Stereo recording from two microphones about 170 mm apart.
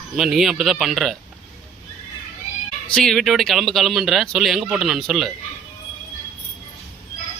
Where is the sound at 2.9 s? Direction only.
5° left (ahead or behind).